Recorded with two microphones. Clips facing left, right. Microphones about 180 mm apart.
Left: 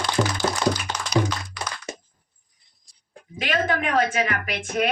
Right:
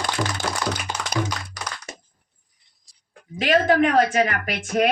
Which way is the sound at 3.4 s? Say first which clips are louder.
Right 7 dB; 40° right (ahead or behind).